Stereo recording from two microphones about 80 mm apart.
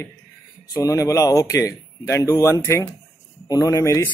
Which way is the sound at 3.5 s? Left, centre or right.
Left.